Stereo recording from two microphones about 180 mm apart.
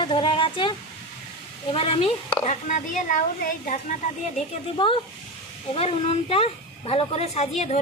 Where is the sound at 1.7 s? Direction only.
35° left (ahead or behind); by 3.8 s 50° left (ahead or behind).